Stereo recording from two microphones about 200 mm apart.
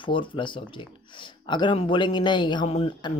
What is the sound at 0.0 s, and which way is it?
Speech, 25° left (ahead or behind).